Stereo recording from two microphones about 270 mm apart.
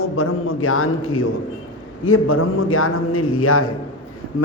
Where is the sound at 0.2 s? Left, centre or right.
Left.